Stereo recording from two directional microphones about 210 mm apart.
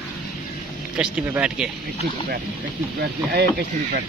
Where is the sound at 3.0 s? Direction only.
45° right (ahead or behind).